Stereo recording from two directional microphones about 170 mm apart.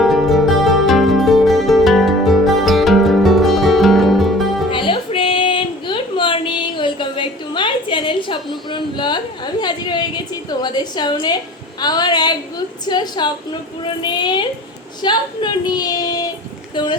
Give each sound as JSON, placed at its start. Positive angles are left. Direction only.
{"t": 0.0, "sound": "music", "side_deg": 0}
{"t": 4.7, "sound": "a sound", "side_deg": 30}
{"t": 15.0, "sound": "child singing", "side_deg": 25}